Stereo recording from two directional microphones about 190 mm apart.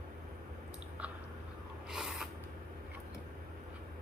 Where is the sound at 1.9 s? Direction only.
Centre (ahead or behind).